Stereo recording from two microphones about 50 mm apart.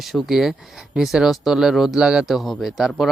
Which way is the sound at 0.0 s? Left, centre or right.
Centre.